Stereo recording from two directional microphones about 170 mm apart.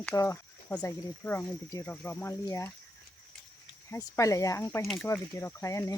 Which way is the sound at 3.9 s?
20° left (ahead or behind).